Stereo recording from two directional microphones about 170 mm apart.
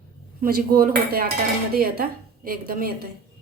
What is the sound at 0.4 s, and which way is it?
A woman's voice, 60° right (ahead or behind).